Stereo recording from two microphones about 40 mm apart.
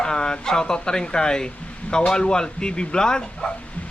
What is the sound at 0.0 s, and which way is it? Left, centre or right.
Speech, centre.